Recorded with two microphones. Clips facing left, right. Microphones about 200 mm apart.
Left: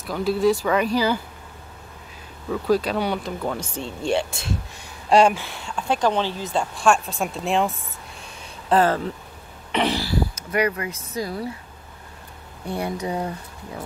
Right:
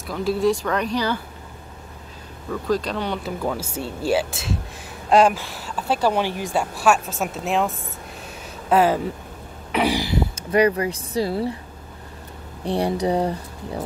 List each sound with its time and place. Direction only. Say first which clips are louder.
0.0 s speech: left 1 dB; centre (ahead or behind)
2.5 s speech: left 2 dB; 5° left (ahead or behind)
3.3 s speech: right 2 dB; 5° right (ahead or behind)
9.7 s a sound: right 2 dB; 10° right (ahead or behind)
10.3 s speech: right 5 dB; 30° right (ahead or behind)
12.6 s speech: right 5 dB; 30° right (ahead or behind)